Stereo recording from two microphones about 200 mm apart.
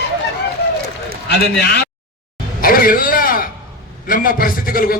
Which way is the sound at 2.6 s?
45° left (ahead or behind).